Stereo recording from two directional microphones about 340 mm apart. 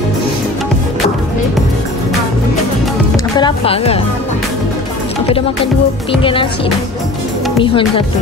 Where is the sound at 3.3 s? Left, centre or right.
Centre.